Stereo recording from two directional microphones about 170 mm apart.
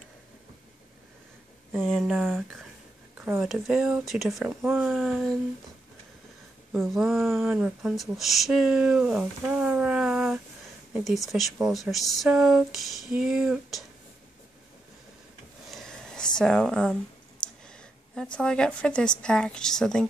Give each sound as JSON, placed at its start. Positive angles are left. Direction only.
{"t": 1.7, "sound": "speech", "side_deg": 0}
{"t": 3.2, "sound": "a sound", "side_deg": -15}
{"t": 3.4, "sound": "speech", "side_deg": -5}
{"t": 6.7, "sound": "speech", "side_deg": 0}
{"t": 15.7, "sound": "a sound", "side_deg": 0}
{"t": 16.3, "sound": "speech", "side_deg": 5}